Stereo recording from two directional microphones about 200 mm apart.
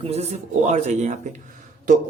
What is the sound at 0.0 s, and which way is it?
Speech, 30° right (ahead or behind).